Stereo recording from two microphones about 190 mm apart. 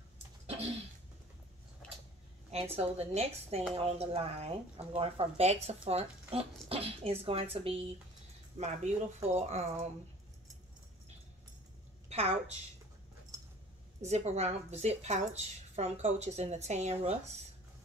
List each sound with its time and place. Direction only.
2.5 s speech: 30° right (ahead or behind)
14.0 s speech: 35° right (ahead or behind)